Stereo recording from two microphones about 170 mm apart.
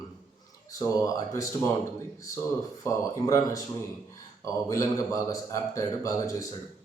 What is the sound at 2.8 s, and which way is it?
Speech, 20° left (ahead or behind).